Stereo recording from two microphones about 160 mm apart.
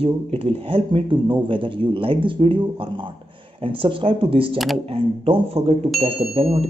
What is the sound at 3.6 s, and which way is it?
Speech, 35° right (ahead or behind).